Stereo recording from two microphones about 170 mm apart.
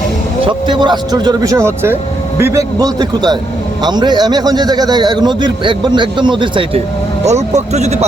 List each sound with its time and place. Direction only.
0.4 s a man's voice: 25° right (ahead or behind)
7.3 s speech: 40° right (ahead or behind)